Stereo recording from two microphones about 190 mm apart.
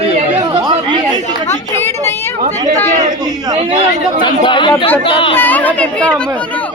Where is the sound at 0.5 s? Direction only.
25° right (ahead or behind).